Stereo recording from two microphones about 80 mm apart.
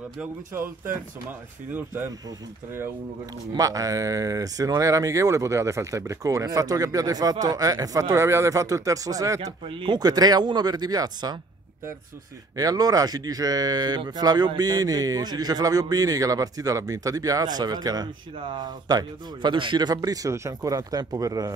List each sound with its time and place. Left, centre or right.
1.7 s speech: right
3.5 s speech: right
9.7 s a man's voice: right
12.5 s speech: right
18.3 s a man's voice: right